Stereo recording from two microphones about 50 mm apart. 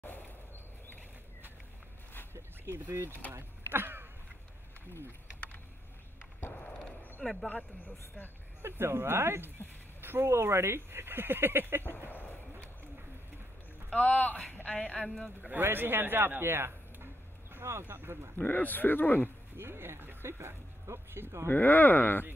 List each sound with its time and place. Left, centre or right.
2.7 s speech: right
3.3 s a sound: right
7.2 s speech: centre
8.6 s speech: right
12.1 s a sound: left
13.8 s a woman's voice: left
15.6 s a man's voice: right
18.4 s a man's voice: left
19.5 s speech: right
21.5 s a man's voice: left